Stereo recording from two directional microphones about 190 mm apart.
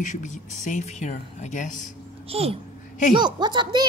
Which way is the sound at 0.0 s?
40° left (ahead or behind).